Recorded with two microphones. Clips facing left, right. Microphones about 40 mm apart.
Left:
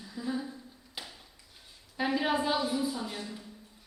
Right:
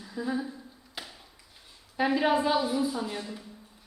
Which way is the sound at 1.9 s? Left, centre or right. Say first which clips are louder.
Right 4 dB; centre.